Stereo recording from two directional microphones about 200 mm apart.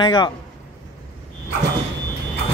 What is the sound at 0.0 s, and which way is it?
Speech, 20° left (ahead or behind).